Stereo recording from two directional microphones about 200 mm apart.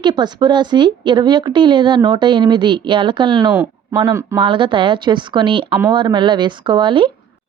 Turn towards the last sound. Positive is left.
turn(degrees=-25)  # may be behind; listen again after turning